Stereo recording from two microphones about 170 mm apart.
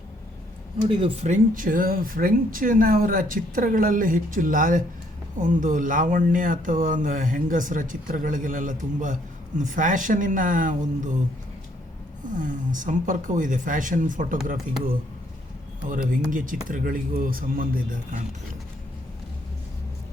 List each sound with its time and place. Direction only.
0.9 s speech: 35° right (ahead or behind)
12.3 s speech: 50° right (ahead or behind)
15.9 s speech: 50° right (ahead or behind)